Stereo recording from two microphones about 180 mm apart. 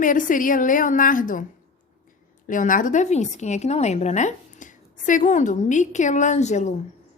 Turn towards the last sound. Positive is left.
turn(degrees=40)  # may be behind; listen again after turning